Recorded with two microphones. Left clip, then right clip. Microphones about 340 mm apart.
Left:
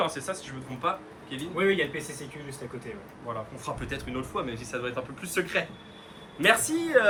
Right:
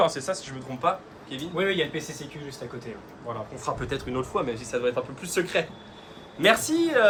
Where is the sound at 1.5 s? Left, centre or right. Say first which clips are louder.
Even; right.